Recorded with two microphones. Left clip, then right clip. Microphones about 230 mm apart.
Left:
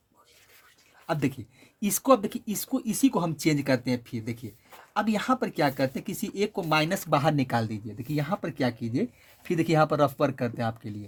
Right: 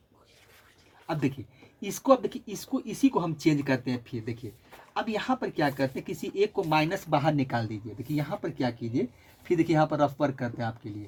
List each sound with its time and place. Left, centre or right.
1.0 s speech: left